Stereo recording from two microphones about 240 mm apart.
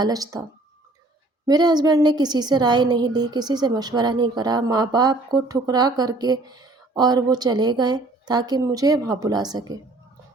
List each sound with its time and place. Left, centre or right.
0.0 s a woman's voice: centre
1.5 s a woman's voice: centre